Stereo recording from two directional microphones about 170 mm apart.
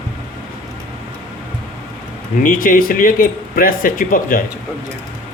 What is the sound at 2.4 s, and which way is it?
Speech, 55° left (ahead or behind).